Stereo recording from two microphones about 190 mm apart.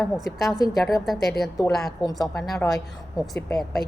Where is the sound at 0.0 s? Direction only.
Centre (ahead or behind).